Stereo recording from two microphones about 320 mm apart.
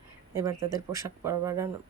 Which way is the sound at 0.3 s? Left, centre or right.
Centre.